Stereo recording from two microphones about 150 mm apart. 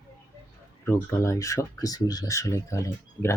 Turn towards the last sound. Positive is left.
turn(degrees=20)  # may be behind; listen again after turning